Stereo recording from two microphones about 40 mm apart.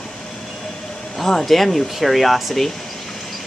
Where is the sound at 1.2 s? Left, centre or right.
Centre.